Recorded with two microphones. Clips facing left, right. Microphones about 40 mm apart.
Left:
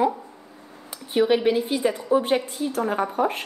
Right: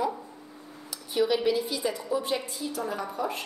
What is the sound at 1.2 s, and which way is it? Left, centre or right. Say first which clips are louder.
A woman's voice: left 5 dB; left.